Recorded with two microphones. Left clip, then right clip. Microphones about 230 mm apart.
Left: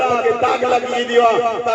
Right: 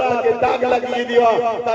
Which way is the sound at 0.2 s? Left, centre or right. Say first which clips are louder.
Left 1 dB; left.